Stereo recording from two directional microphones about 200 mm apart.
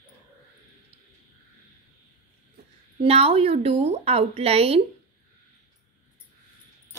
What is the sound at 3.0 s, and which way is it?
Speech, 30° right (ahead or behind).